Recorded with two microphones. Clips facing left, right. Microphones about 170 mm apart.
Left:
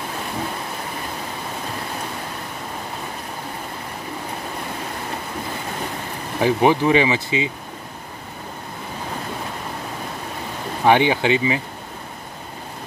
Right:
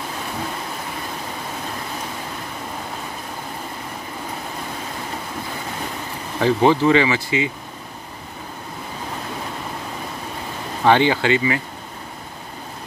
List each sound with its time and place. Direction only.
6.4 s speech: 15° left (ahead or behind)
10.8 s speech: 15° left (ahead or behind)